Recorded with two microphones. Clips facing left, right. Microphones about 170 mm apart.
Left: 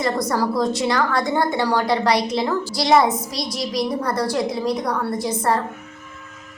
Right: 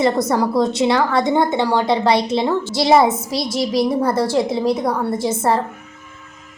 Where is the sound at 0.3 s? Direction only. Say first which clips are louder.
Right 3 dB; 25° right (ahead or behind).